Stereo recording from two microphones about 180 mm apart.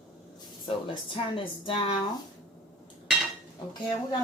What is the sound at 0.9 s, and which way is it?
Speech, 30° left (ahead or behind).